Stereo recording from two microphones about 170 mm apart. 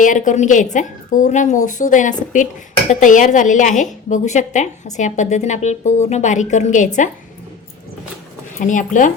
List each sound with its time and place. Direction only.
0.0 s a woman's voice: 50° left (ahead or behind)
8.5 s a woman's voice: 50° left (ahead or behind)